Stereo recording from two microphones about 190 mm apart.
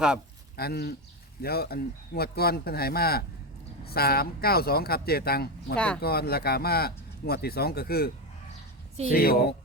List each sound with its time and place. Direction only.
0.5 s speech: 55° left (ahead or behind)
5.7 s speech: 5° left (ahead or behind)
6.0 s speech: 55° left (ahead or behind)